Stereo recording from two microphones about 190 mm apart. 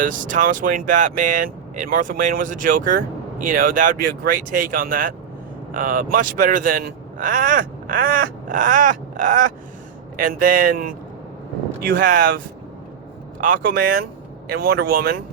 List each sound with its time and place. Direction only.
0.0 s speech: 45° right (ahead or behind)
11.9 s speech: 45° right (ahead or behind)
13.4 s speech: 45° right (ahead or behind)